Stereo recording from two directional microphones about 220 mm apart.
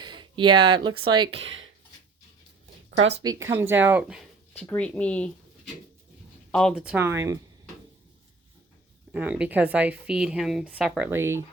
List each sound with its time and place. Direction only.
0.0 s a sound: 20° right (ahead or behind)
1.0 s speech: 20° right (ahead or behind)
2.9 s speech: 60° right (ahead or behind)
3.2 s speech: 15° right (ahead or behind)
4.6 s speech: 5° left (ahead or behind)
6.5 s speech: 5° left (ahead or behind); by 7.3 s 15° right (ahead or behind)
9.1 s speech: 5° right (ahead or behind)